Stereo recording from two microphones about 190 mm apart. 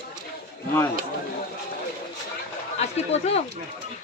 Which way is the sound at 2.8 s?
35° left (ahead or behind).